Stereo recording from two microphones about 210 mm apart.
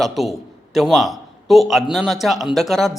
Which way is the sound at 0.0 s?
Centre (ahead or behind).